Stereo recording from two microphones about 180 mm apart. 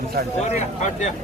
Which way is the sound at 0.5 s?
40° left (ahead or behind).